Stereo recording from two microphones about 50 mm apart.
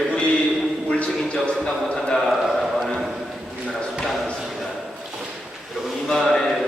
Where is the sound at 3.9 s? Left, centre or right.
Centre.